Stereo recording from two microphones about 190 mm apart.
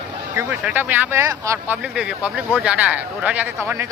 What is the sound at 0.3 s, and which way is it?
Speech, 10° right (ahead or behind).